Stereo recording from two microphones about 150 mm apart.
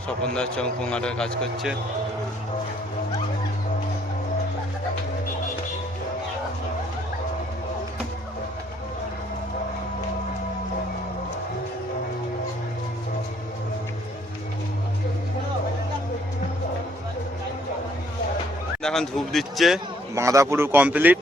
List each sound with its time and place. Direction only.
0.2 s a man's voice: 5° left (ahead or behind)
18.8 s a man's voice: 5° left (ahead or behind)
20.1 s speech: 20° right (ahead or behind)